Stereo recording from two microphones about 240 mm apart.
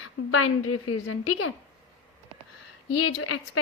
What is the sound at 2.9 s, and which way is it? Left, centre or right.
Speech, left.